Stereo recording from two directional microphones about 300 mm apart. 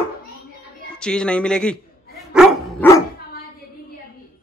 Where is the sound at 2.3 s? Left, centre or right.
Centre.